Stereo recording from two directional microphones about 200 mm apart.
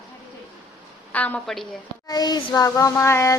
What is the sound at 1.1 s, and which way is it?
Speech, 5° left (ahead or behind).